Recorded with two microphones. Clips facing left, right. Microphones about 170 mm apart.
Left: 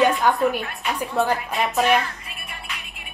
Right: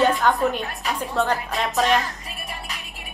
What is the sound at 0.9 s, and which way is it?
A woman's voice, 10° left (ahead or behind).